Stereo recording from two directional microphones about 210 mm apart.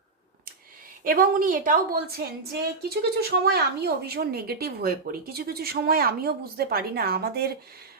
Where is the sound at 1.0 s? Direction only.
40° right (ahead or behind).